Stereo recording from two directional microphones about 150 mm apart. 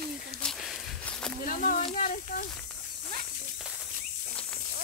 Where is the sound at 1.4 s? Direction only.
65° left (ahead or behind).